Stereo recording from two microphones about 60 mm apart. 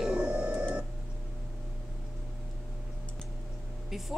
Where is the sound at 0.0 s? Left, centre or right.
Centre.